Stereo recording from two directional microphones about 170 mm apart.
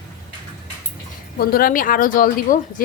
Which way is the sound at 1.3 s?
60° left (ahead or behind).